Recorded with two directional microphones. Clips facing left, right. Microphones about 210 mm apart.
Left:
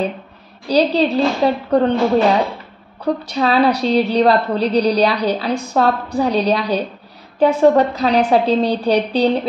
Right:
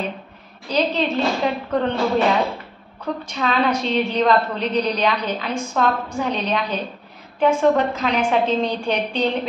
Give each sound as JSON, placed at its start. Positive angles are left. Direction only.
{"t": 0.7, "sound": "a woman's voice", "side_deg": 35}
{"t": 3.0, "sound": "a woman's voice", "side_deg": 35}